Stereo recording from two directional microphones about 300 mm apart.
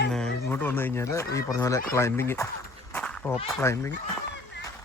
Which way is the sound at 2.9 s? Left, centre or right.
Centre.